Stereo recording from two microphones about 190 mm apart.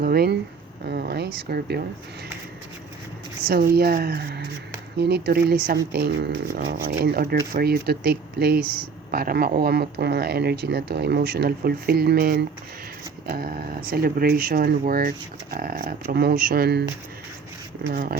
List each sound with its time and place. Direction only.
0.0 s speech: 55° right (ahead or behind)
3.4 s speech: 50° right (ahead or behind)
17.8 s speech: 50° right (ahead or behind)